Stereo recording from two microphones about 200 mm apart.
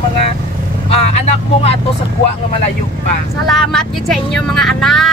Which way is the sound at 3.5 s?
Centre (ahead or behind).